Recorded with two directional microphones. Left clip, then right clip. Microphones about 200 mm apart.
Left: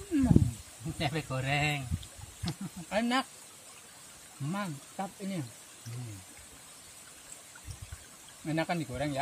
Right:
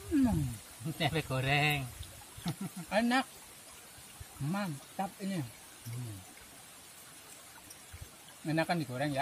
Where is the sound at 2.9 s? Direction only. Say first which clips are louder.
Even; 15° left (ahead or behind).